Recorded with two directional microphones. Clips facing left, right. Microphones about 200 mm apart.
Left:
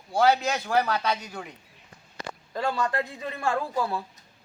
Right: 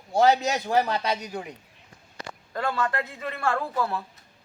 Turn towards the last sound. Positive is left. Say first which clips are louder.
# even
turn(degrees=15)  # may be behind; listen again after turning